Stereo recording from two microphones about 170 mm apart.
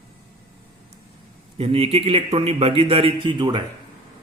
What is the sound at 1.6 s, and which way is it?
A man's voice, 35° right (ahead or behind).